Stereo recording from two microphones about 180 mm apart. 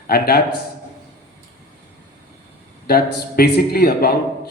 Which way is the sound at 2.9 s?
60° left (ahead or behind).